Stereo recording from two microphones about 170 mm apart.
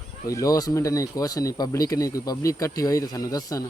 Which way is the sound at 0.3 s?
20° left (ahead or behind).